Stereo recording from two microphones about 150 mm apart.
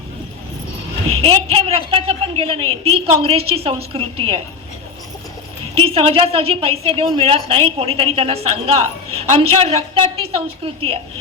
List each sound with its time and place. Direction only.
1.2 s a woman's voice: 40° right (ahead or behind)
5.7 s a woman's voice: 40° right (ahead or behind)